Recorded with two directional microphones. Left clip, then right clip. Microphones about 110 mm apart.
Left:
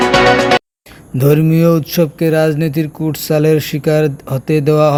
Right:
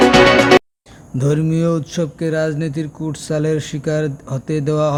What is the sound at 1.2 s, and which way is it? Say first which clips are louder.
A man's voice: left 7 dB; 35° left (ahead or behind).